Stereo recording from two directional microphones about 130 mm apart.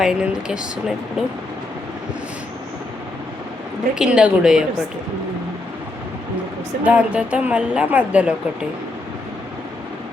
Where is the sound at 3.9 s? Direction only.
5° right (ahead or behind).